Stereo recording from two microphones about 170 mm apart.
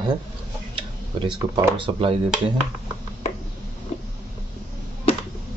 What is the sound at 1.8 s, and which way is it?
Speech, 30° right (ahead or behind).